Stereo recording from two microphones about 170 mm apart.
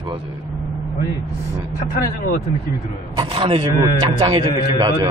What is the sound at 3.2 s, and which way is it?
Speech, 30° right (ahead or behind).